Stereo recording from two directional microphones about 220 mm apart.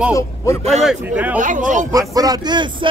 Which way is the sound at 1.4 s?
35° right (ahead or behind).